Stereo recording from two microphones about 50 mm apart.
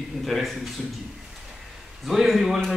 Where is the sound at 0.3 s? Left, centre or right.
Centre.